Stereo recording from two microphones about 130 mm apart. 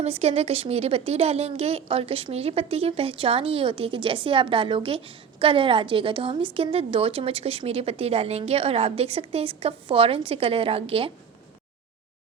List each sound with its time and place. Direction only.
0.0 s speech: 50° right (ahead or behind)